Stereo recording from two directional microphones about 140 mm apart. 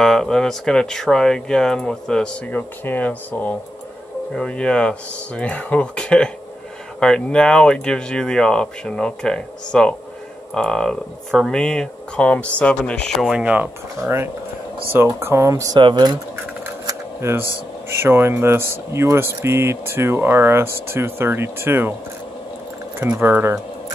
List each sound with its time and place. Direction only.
0.0 s speech: 5° left (ahead or behind); by 16.2 s 30° right (ahead or behind)
16.6 s a sound: 20° right (ahead or behind)
17.8 s speech: 15° right (ahead or behind)
22.9 s speech: 10° right (ahead or behind)